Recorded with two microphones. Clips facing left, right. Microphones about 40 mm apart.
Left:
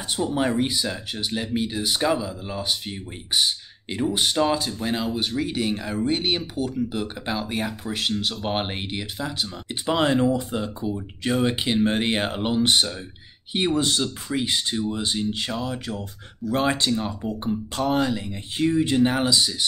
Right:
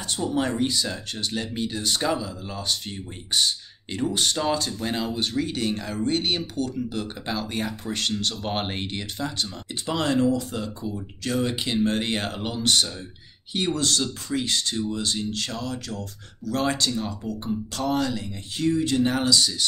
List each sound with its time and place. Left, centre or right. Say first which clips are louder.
0.1 s speech: left 2 dB; centre
9.8 s speech: left 2 dB; left